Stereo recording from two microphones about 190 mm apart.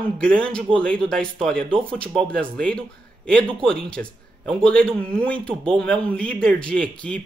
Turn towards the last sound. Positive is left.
turn(degrees=5)  # may be behind; listen again after turning